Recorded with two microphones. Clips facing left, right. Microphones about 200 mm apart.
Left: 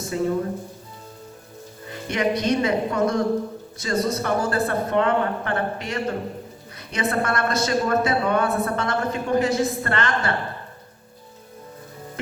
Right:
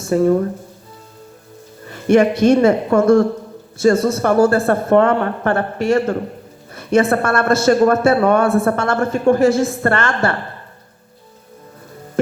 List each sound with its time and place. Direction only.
0.1 s speech: 50° right (ahead or behind)
1.9 s music: 50° right (ahead or behind)
2.4 s speech: 50° right (ahead or behind)